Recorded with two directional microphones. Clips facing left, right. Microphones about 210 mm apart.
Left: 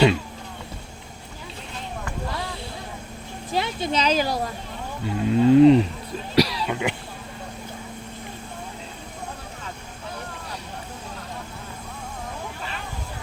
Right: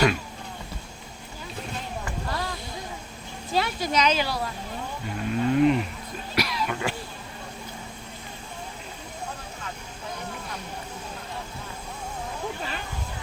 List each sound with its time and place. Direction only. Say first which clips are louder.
3.5 s speech: left 1 dB; 20° left (ahead or behind); by 4.4 s 45° left (ahead or behind)
5.0 s speech: left 8 dB; 25° left (ahead or behind)
6.3 s cough: left 7 dB; 35° left (ahead or behind)
6.7 s speech: left 3 dB; 20° left (ahead or behind)